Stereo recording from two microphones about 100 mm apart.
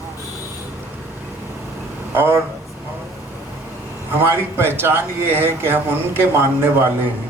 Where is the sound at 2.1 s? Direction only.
20° right (ahead or behind).